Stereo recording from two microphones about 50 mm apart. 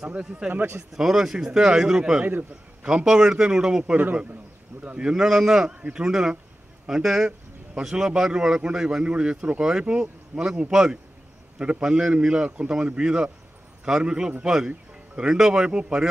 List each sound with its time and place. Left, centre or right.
0.2 s speech: centre
0.5 s a man's voice: right
0.9 s speech: centre
3.9 s a man's voice: right
4.8 s speech: right
15.7 s speech: right